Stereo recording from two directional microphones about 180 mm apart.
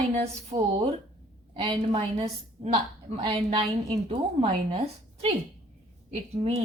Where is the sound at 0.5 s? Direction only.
25° right (ahead or behind).